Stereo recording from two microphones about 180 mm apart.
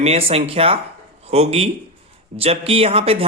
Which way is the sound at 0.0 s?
35° right (ahead or behind).